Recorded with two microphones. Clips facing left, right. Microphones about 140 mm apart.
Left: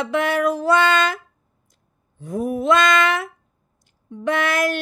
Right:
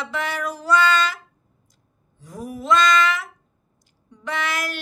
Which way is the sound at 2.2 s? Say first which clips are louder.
Left 9 dB; 55° left (ahead or behind).